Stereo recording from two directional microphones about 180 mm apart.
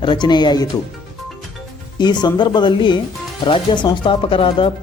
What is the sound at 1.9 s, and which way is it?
Speech, 25° left (ahead or behind).